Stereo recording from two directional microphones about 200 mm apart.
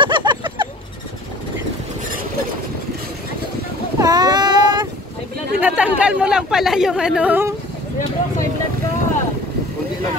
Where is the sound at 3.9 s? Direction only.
20° right (ahead or behind).